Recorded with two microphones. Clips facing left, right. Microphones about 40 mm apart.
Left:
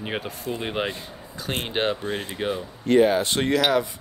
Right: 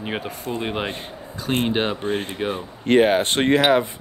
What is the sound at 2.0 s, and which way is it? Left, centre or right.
Speech, right.